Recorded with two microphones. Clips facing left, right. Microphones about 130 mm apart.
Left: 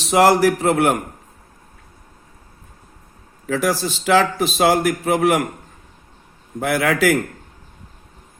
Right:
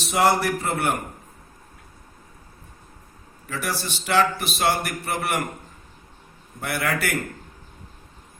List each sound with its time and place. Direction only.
0.0 s a man's voice: 90° left
3.4 s a man's voice: 90° left
6.6 s a man's voice: 90° left